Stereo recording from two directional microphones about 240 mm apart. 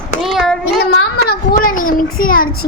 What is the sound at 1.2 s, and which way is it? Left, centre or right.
A child's voice, left.